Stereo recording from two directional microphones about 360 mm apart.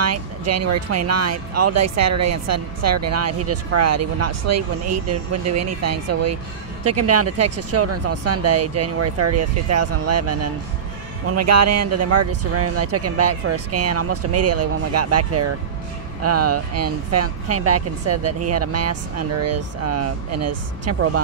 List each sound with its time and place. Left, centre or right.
0.0 s speech: right